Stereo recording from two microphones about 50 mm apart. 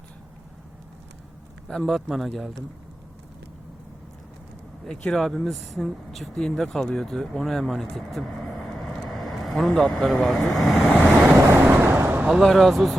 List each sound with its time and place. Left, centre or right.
1.6 s a man's voice: centre
4.9 s speech: centre
8.6 s vehicle: centre
8.9 s vehicle: centre
10.2 s speech: centre
10.8 s vehicle: left
11.5 s vehicle: right
12.0 s a sound: right
12.4 s speech: centre